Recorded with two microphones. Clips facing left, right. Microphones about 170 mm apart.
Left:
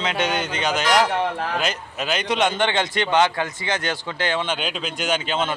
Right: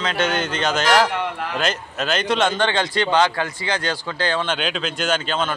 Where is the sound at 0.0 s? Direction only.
15° left (ahead or behind).